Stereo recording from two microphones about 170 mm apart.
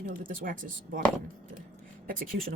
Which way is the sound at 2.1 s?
55° right (ahead or behind).